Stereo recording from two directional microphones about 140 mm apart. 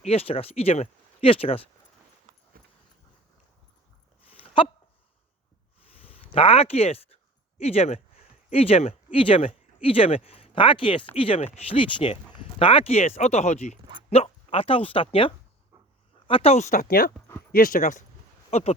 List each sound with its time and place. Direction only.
0.0 s speech: 45° left (ahead or behind)
4.3 s a sound: 40° left (ahead or behind)
6.0 s a sound: 40° left (ahead or behind)
7.6 s speech: 45° left (ahead or behind)
14.1 s speech: 45° left (ahead or behind); by 18.0 s 70° left (ahead or behind)
18.5 s speech: 50° left (ahead or behind)